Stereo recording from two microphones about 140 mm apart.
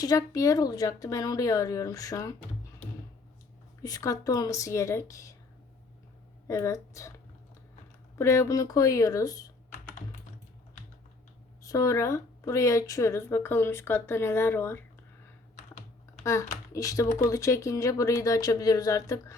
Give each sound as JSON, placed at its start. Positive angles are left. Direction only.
{"t": 0.0, "sound": "speech", "side_deg": 25}
{"t": 3.8, "sound": "speech", "side_deg": 25}
{"t": 6.5, "sound": "speech", "side_deg": 20}
{"t": 8.2, "sound": "speech", "side_deg": 20}
{"t": 11.6, "sound": "speech", "side_deg": 25}
{"t": 16.2, "sound": "speech", "side_deg": 20}